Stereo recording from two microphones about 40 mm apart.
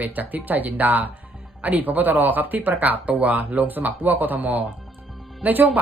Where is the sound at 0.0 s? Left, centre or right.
Right.